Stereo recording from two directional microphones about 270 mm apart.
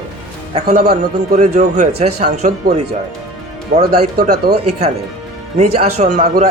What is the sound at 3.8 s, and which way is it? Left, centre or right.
Speech, right.